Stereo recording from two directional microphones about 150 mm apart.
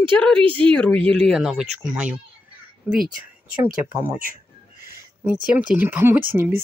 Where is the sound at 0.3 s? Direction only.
35° right (ahead or behind).